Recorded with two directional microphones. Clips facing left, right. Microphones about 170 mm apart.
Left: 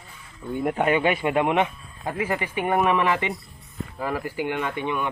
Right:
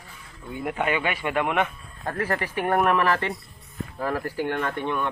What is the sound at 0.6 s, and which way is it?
Speech, 40° left (ahead or behind).